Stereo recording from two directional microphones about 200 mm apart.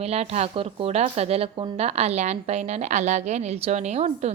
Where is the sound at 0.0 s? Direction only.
30° right (ahead or behind).